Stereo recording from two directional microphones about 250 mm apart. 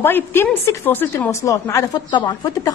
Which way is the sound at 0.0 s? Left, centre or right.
Centre.